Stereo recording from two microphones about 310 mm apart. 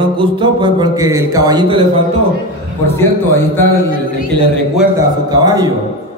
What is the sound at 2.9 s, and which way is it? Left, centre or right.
Speech, centre.